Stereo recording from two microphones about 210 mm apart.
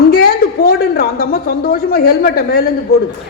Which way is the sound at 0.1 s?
45° left (ahead or behind).